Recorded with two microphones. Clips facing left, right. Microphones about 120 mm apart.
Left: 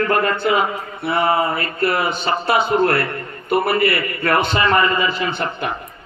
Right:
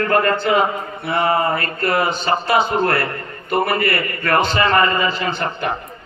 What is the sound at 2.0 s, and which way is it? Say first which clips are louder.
Speech: right 1 dB; 60° left (ahead or behind).